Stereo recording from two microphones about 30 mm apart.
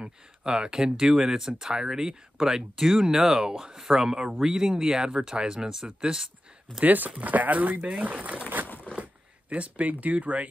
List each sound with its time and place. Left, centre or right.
0.0 s speech: right
6.1 s a sound: centre
6.8 s speech: right
9.5 s speech: right